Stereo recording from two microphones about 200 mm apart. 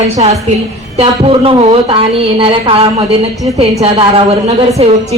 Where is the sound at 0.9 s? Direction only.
30° right (ahead or behind).